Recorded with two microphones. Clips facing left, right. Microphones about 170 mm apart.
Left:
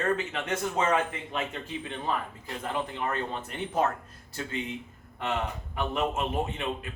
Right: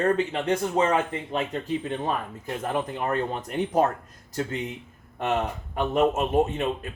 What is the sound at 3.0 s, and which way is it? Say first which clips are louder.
Speech: right 5 dB; 35° right (ahead or behind).